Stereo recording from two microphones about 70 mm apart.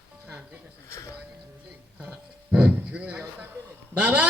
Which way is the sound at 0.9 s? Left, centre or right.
Left.